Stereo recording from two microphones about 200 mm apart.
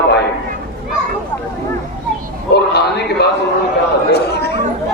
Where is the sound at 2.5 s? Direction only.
55° left (ahead or behind).